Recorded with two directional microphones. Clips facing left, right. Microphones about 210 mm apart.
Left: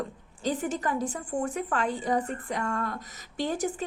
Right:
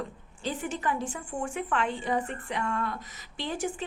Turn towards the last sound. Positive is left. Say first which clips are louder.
# left 3 dB
turn(degrees=40)  # may be behind; listen again after turning